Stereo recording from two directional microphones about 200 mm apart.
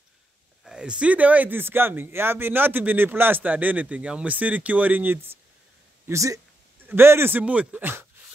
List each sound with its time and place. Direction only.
0.7 s speech: 5° right (ahead or behind)